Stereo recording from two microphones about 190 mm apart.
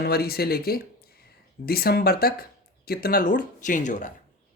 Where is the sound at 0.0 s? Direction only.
55° left (ahead or behind).